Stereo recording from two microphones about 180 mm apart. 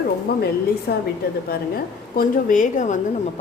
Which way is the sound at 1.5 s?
55° left (ahead or behind).